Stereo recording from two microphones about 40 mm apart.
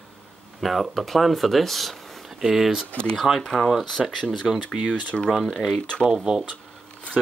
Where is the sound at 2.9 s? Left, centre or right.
Left.